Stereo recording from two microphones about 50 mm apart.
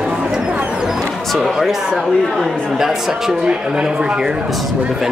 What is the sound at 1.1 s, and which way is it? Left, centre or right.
Music, centre.